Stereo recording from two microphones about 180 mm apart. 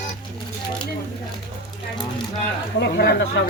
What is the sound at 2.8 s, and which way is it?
Speech, 65° left (ahead or behind).